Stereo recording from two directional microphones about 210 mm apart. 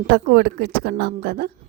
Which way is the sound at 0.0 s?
50° right (ahead or behind).